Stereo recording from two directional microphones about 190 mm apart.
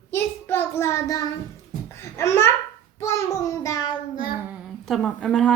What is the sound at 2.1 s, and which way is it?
Babbling, 15° left (ahead or behind).